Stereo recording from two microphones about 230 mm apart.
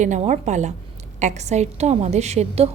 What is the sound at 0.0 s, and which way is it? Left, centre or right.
A woman's voice, right.